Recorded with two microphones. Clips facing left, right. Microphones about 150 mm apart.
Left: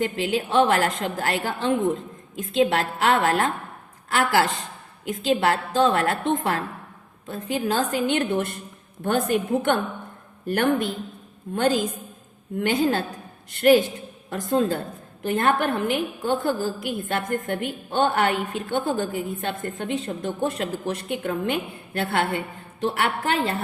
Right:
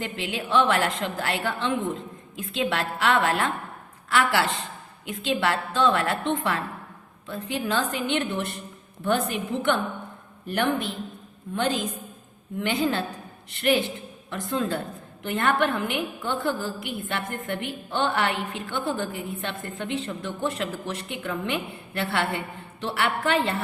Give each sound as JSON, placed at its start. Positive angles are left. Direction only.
{"t": 0.0, "sound": "a woman's voice", "side_deg": 40}